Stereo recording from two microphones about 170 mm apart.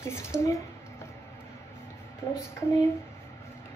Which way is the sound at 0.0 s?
15° left (ahead or behind).